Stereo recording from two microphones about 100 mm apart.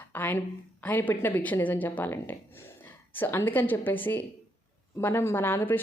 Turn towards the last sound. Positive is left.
turn(degrees=20)  # may be behind; listen again after turning